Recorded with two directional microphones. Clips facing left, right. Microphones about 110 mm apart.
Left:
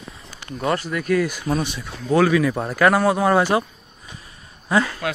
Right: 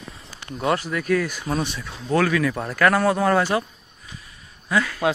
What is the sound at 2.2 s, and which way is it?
Speech, 20° left (ahead or behind).